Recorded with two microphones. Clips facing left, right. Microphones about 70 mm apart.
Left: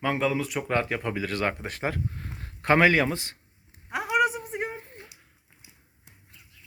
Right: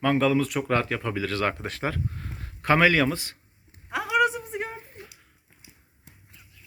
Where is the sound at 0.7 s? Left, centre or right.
Centre.